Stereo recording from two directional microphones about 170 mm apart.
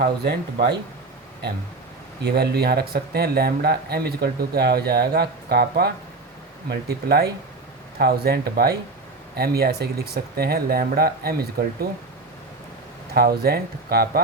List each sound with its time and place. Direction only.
0.0 s speech: 60° right (ahead or behind)
2.2 s speech: 70° right (ahead or behind)
13.1 s speech: 65° right (ahead or behind)